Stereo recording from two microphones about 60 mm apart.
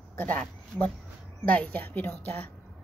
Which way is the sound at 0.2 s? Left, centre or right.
Left.